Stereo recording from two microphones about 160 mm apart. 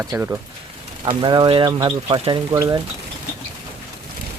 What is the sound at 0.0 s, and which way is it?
Speech, 15° right (ahead or behind).